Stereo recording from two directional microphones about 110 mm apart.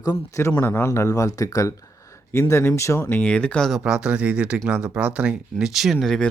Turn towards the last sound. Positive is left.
turn(degrees=0)  # may be behind; listen again after turning